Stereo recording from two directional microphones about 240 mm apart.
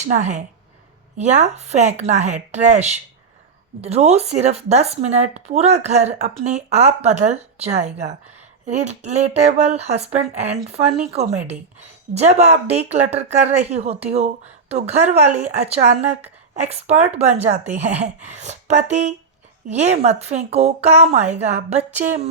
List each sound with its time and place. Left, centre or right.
0.0 s speech: right
12.1 s speech: right